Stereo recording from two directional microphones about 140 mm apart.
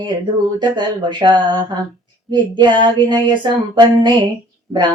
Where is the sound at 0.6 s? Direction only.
35° right (ahead or behind).